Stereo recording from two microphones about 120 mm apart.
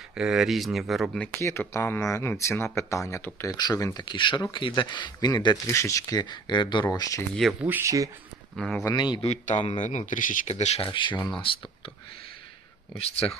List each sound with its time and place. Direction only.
0.1 s speech: 5° right (ahead or behind)
1.4 s speech: 25° left (ahead or behind)
3.6 s speech: 35° left (ahead or behind)
5.6 s speech: 25° left (ahead or behind)
7.6 s speech: 15° right (ahead or behind)
7.9 s speech: 25° right (ahead or behind)
8.5 s speech: 5° left (ahead or behind)
8.9 s speech: 40° left (ahead or behind)
9.2 s speech: 70° left (ahead or behind)
10.8 s speech: 45° left (ahead or behind)
13.0 s speech: 55° left (ahead or behind)